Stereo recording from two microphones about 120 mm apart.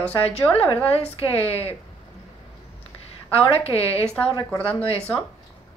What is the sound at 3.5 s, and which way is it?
Speech, 55° left (ahead or behind).